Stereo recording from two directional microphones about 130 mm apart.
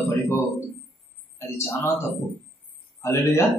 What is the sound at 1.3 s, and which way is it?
Speech, 20° left (ahead or behind).